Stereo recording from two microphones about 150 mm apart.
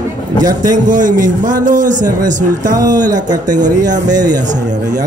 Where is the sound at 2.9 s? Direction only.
25° right (ahead or behind).